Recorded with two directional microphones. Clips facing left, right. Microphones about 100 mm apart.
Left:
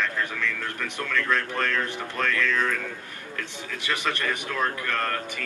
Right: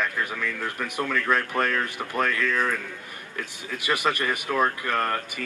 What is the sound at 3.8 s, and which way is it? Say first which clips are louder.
A man's voice: right 3 dB; 10° right (ahead or behind).